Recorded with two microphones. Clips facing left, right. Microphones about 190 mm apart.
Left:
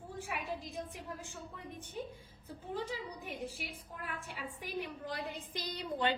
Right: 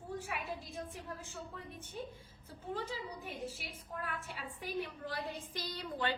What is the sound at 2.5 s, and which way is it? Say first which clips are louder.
A woman's voice: left 1 dB; 15° left (ahead or behind).